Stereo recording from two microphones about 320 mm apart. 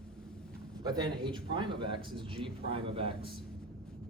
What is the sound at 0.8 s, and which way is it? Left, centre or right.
A man's voice, centre.